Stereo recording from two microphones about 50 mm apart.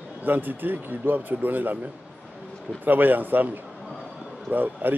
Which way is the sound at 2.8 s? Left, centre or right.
Right.